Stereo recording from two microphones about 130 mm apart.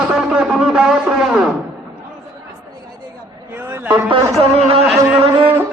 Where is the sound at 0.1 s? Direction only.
5° right (ahead or behind).